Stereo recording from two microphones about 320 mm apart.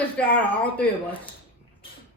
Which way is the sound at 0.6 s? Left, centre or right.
Centre.